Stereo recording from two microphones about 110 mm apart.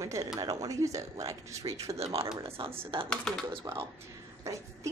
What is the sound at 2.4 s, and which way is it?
Speech, 60° right (ahead or behind).